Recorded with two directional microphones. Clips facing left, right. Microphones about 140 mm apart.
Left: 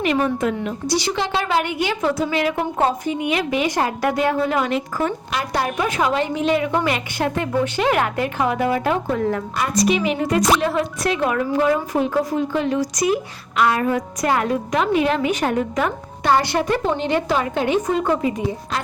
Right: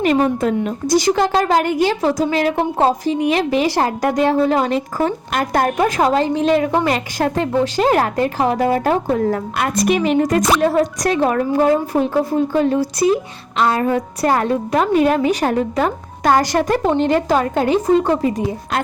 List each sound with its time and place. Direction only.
0.0 s a woman's voice: 40° right (ahead or behind)
6.1 s a woman's voice: 35° right (ahead or behind)
9.6 s a woman's voice: 60° right (ahead or behind); by 18.4 s 35° right (ahead or behind)